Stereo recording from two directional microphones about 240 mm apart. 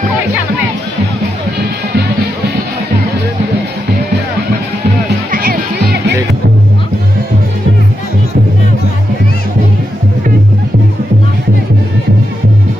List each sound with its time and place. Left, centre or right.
5.3 s music: right